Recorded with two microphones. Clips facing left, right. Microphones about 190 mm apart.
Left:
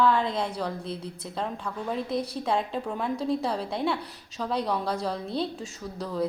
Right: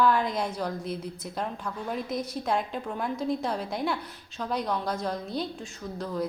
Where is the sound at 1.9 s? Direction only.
30° left (ahead or behind).